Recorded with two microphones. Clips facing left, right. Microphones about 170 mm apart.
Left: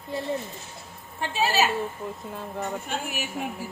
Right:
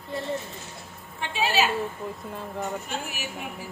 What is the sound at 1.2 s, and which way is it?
Speech, 40° left (ahead or behind).